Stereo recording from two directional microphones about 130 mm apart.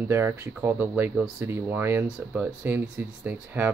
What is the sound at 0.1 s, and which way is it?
Speech, 20° right (ahead or behind).